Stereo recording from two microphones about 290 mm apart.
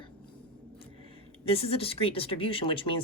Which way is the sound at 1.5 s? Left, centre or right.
Centre.